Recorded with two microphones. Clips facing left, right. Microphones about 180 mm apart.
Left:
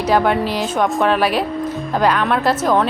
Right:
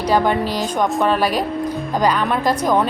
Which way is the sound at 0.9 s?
5° left (ahead or behind).